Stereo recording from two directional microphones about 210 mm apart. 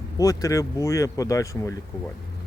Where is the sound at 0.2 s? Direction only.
15° left (ahead or behind).